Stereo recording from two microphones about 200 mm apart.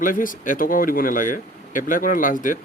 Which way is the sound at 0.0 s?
40° left (ahead or behind).